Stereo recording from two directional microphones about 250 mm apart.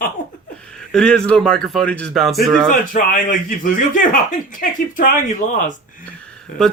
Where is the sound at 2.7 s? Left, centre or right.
Left.